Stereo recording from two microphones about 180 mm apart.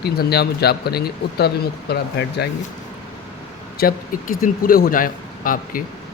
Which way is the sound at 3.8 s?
55° left (ahead or behind).